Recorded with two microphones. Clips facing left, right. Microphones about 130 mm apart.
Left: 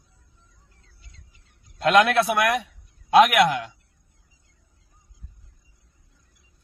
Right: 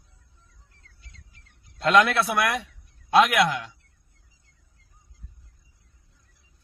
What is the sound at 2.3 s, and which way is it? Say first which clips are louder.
Speech: left 3 dB; 50° left (ahead or behind).